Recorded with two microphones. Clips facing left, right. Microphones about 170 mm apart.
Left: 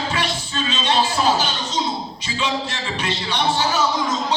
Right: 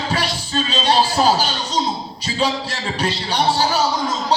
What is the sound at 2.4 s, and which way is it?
Music, 35° right (ahead or behind).